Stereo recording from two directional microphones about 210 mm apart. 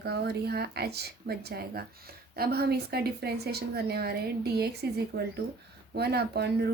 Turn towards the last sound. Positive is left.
turn(degrees=-50)  # may be behind; listen again after turning